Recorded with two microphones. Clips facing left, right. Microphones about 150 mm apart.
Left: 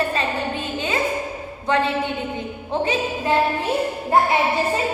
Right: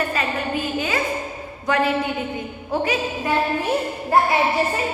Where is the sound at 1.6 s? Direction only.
25° left (ahead or behind).